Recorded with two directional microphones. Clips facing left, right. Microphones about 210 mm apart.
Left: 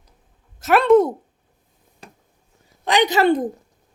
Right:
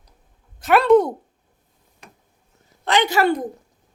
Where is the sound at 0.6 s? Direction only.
Centre (ahead or behind).